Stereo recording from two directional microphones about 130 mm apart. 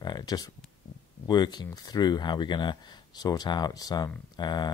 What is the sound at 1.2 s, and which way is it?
Speech, 35° left (ahead or behind).